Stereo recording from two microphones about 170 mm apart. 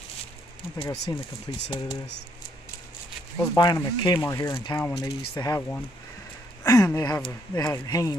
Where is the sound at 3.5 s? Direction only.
20° left (ahead or behind).